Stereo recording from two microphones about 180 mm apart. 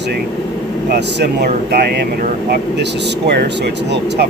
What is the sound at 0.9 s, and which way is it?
Speech, 65° right (ahead or behind).